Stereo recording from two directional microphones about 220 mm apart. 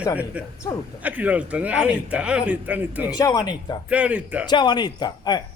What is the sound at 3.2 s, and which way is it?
Speech, 20° left (ahead or behind).